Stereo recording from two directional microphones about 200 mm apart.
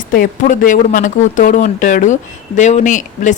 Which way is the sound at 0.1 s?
45° left (ahead or behind).